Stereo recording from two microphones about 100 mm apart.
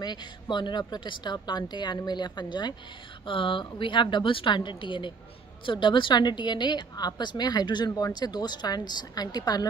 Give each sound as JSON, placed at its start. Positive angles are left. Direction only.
{"t": 0.0, "sound": "a woman's voice", "side_deg": 45}